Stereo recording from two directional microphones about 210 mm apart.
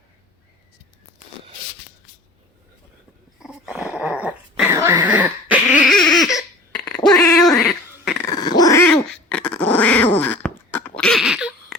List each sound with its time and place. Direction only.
3.4 s dog: 5° right (ahead or behind)
8.3 s dog: 20° left (ahead or behind)
8.9 s dog: 5° left (ahead or behind)